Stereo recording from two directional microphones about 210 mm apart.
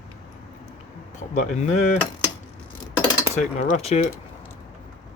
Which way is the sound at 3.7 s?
30° left (ahead or behind).